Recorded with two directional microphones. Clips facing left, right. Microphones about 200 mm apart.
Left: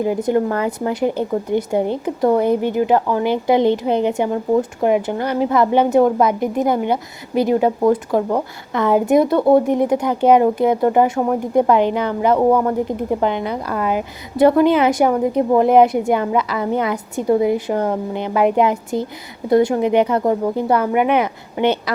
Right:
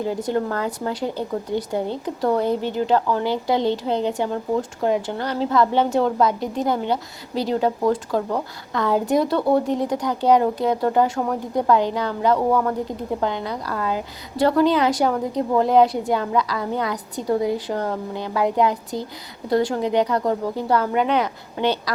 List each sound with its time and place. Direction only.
0.0 s speech: 15° left (ahead or behind)